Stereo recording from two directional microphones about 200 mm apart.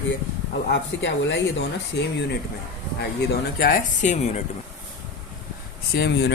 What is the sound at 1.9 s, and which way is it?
Speech, 60° left (ahead or behind).